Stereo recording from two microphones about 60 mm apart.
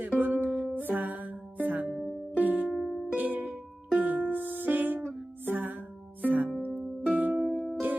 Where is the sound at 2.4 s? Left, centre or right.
Right.